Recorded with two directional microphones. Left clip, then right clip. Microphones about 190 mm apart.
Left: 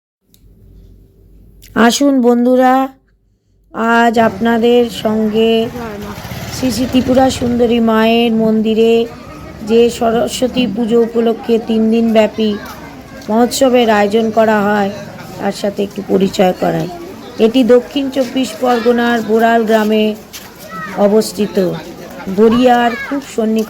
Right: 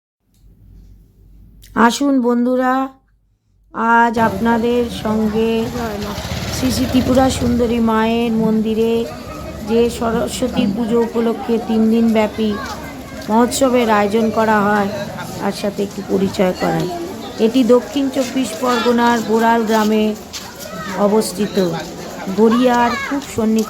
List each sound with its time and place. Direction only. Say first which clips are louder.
1.7 s speech: left 3 dB; 5° left (ahead or behind)
20.3 s a sound: right 2 dB; 30° left (ahead or behind)
21.0 s speech: left 4 dB; centre (ahead or behind)